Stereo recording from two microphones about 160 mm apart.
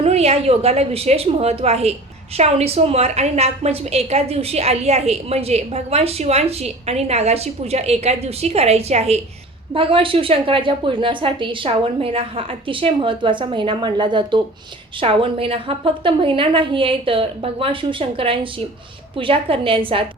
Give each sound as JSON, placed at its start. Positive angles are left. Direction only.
{"t": 0.0, "sound": "a woman's voice", "side_deg": -40}